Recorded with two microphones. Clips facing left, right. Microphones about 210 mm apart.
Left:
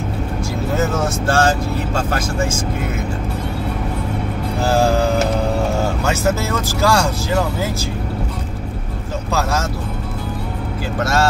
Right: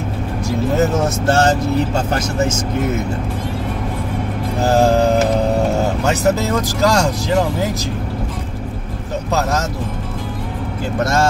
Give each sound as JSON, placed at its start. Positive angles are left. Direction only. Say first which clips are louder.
{"t": 0.7, "sound": "speech", "louder": "right 1 dB", "side_deg": -20}
{"t": 2.0, "sound": "music", "louder": "right 2 dB", "side_deg": -20}
{"t": 4.6, "sound": "music", "louder": "right 3 dB", "side_deg": -20}
{"t": 6.0, "sound": "speech", "louder": "right 3 dB", "side_deg": -15}
{"t": 9.3, "sound": "music", "louder": "right 1 dB", "side_deg": -20}